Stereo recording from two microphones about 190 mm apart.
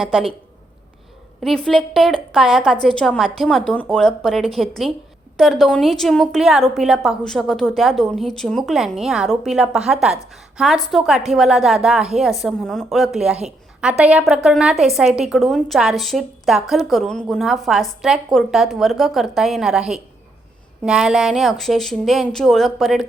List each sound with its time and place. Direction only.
0.0 s a woman's voice: centre (ahead or behind)
1.4 s a woman's voice: centre (ahead or behind)